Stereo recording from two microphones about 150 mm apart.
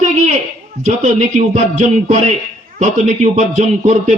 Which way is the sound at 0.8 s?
50° right (ahead or behind).